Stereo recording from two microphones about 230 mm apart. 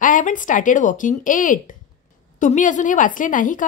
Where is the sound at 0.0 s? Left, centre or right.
Left.